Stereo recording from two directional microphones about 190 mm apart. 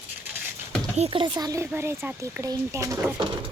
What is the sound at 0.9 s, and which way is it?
A child's voice, 30° right (ahead or behind).